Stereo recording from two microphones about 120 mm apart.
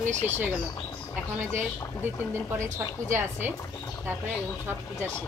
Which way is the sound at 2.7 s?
20° right (ahead or behind).